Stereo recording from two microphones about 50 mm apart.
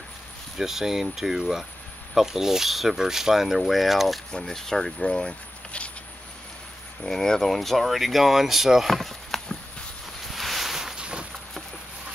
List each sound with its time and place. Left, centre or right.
0.6 s speech: centre
4.4 s speech: centre
5.0 s speech: centre
7.0 s speech: centre
8.9 s chop: centre
10.3 s a sound: centre
11.0 s a sound: centre